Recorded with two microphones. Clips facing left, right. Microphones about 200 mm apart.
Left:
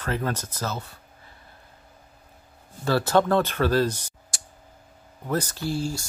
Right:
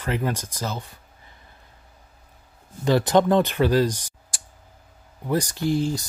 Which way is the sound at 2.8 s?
15° right (ahead or behind).